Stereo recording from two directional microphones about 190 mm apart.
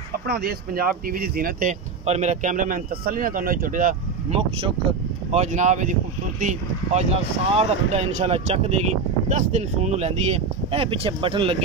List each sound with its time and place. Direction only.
0.3 s speech: 50° right (ahead or behind)
4.3 s speech: 30° right (ahead or behind)